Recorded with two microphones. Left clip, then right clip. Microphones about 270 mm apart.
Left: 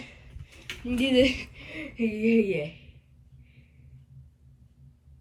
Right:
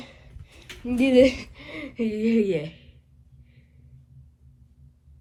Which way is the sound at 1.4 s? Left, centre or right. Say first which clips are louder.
Right 1 dB; centre.